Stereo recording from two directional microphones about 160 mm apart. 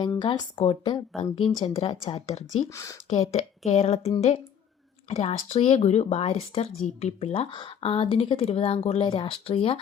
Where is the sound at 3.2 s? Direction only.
45° left (ahead or behind).